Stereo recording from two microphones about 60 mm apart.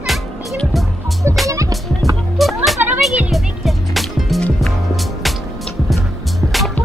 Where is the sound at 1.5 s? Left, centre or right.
Right.